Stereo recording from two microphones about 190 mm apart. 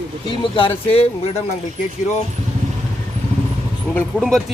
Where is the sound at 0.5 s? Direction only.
30° left (ahead or behind).